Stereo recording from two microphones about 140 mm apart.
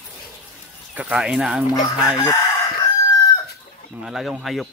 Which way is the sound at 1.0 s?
10° right (ahead or behind).